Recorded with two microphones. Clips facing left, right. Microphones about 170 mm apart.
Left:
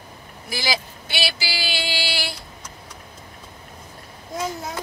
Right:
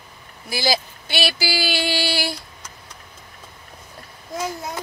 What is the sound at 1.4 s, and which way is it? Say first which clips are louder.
Female singing: right 6 dB; 40° right (ahead or behind).